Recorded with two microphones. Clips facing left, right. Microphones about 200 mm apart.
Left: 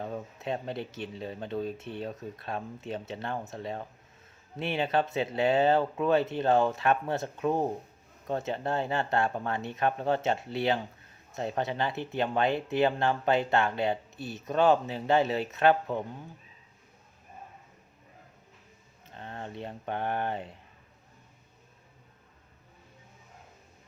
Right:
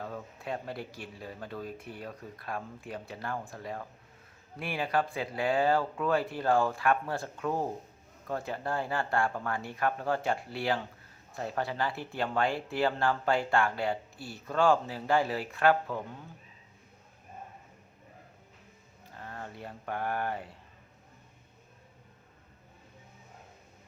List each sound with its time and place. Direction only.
0.0 s speech: 20° left (ahead or behind)
19.0 s speech: 25° left (ahead or behind)